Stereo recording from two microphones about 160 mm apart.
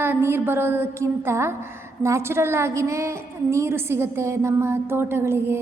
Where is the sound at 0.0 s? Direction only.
15° right (ahead or behind).